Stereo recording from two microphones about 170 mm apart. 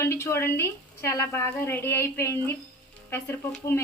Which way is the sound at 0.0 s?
15° left (ahead or behind).